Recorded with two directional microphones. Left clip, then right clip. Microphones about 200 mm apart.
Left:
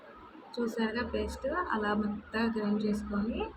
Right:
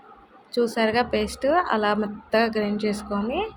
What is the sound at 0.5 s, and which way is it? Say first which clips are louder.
A woman's voice: right 12 dB; 45° right (ahead or behind).